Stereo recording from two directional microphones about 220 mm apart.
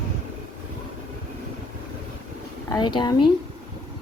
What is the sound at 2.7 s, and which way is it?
Speech, 20° left (ahead or behind).